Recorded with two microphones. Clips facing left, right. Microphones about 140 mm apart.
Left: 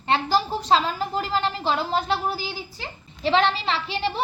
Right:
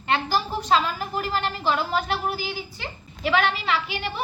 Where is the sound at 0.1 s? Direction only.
30° left (ahead or behind).